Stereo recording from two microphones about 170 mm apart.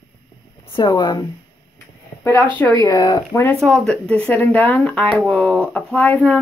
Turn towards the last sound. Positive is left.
turn(degrees=10)  # may be behind; listen again after turning